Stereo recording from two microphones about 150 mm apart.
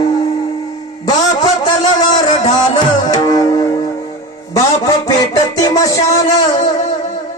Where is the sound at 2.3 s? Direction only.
50° left (ahead or behind).